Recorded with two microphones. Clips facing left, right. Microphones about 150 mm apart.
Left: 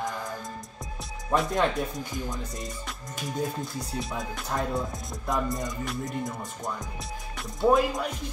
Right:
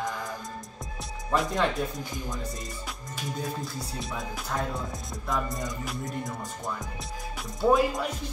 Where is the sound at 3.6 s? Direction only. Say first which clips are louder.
Left 2 dB; centre (ahead or behind).